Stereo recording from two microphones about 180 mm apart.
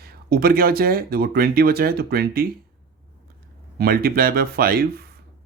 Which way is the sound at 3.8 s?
55° right (ahead or behind).